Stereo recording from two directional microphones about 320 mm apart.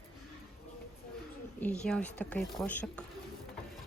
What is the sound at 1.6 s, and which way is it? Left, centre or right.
A woman's voice, centre.